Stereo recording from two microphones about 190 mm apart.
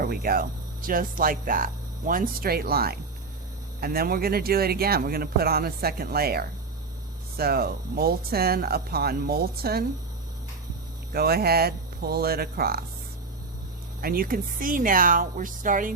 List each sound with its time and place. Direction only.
0.0 s speech: 50° right (ahead or behind)
11.1 s speech: 55° right (ahead or behind)
14.0 s speech: 50° right (ahead or behind)